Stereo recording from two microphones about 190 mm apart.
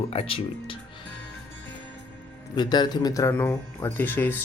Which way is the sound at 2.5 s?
20° left (ahead or behind).